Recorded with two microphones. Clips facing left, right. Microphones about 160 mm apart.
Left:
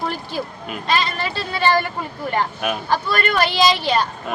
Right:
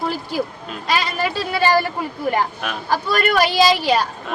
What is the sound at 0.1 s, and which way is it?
Speech, 10° right (ahead or behind).